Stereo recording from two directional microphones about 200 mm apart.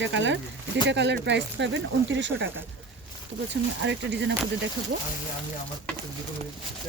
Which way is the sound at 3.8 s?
60° right (ahead or behind).